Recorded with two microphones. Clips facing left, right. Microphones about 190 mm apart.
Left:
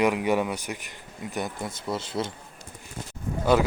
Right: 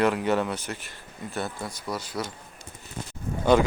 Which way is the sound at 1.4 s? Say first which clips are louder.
Left 1 dB; 25° left (ahead or behind).